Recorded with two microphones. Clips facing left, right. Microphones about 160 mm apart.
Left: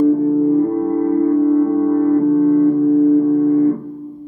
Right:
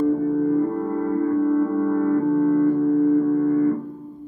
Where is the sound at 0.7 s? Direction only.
25° left (ahead or behind).